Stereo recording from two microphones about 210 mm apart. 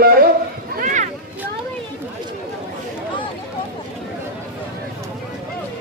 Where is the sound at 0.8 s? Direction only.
35° right (ahead or behind).